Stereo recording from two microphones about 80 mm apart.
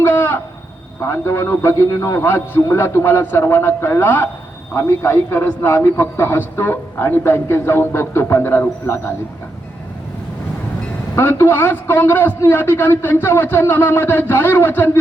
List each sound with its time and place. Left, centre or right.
0.0 s a sound: left
1.0 s a man's voice: left
11.1 s a man's voice: left